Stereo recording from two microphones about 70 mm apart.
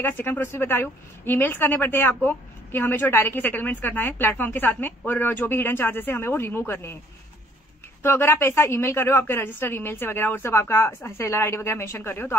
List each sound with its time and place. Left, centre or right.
0.0 s speech: left
8.0 s speech: left